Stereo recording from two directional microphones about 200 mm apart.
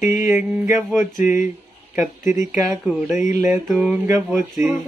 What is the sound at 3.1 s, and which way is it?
Mantra, 40° left (ahead or behind).